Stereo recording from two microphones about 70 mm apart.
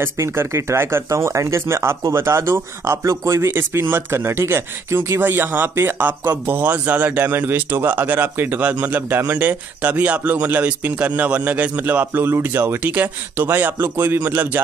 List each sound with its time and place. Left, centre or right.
0.0 s a man's voice: right